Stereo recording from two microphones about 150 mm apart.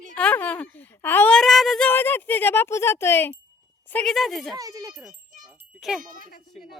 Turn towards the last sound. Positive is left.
turn(degrees=-5)  # may be behind; listen again after turning